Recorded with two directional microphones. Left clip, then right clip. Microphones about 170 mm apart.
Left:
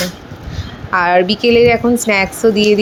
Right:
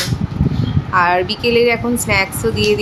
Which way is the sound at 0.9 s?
30° left (ahead or behind).